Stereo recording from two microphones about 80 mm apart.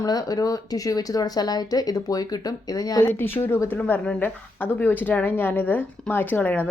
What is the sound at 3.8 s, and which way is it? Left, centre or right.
A woman's voice, centre.